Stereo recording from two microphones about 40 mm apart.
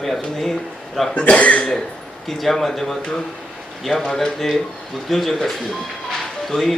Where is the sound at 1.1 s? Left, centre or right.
Left.